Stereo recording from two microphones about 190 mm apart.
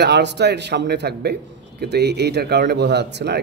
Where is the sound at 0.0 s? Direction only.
60° right (ahead or behind).